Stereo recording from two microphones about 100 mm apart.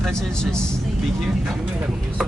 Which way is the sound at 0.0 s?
5° left (ahead or behind).